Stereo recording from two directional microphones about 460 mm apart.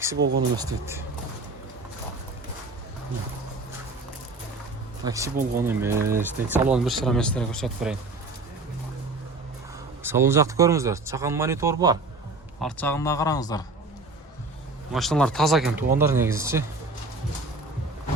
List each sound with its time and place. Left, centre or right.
0.2 s speech: right
0.5 s speech: centre
5.0 s speech: centre
10.0 s a man's voice: centre
14.9 s speech: centre